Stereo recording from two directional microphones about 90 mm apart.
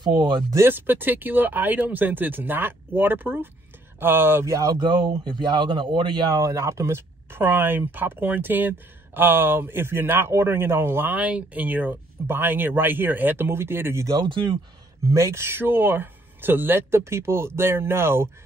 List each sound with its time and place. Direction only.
0.0 s speech: 60° right (ahead or behind)
0.5 s speech: 25° right (ahead or behind)
4.7 s speech: 60° right (ahead or behind)
6.3 s speech: 35° right (ahead or behind)
14.0 s speech: 50° right (ahead or behind)
15.0 s speech: 30° right (ahead or behind)